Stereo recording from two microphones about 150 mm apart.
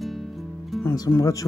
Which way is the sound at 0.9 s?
25° left (ahead or behind).